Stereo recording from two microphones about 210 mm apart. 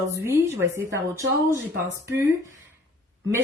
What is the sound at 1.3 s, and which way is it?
Speech, 55° right (ahead or behind).